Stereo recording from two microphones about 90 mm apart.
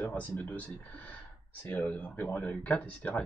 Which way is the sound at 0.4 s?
15° left (ahead or behind).